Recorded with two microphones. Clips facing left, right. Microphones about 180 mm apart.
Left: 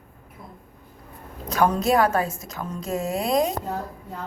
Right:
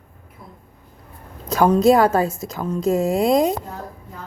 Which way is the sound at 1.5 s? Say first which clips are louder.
Right 6 dB; 30° right (ahead or behind).